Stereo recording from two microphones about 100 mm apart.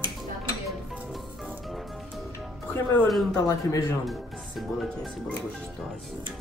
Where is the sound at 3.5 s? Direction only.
35° left (ahead or behind).